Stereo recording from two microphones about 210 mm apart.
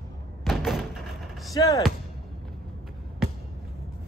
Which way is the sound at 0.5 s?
Centre (ahead or behind).